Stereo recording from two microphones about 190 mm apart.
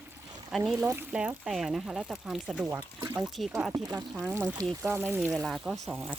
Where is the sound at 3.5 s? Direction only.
15° right (ahead or behind).